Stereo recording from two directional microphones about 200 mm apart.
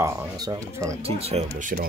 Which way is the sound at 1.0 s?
30° right (ahead or behind).